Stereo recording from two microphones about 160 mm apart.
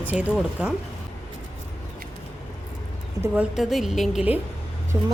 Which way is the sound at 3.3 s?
5° right (ahead or behind).